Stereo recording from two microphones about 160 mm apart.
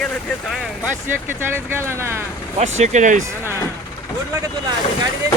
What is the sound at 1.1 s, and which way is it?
Speech, 15° right (ahead or behind).